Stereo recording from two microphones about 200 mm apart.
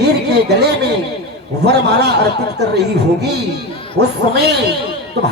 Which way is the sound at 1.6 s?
55° right (ahead or behind).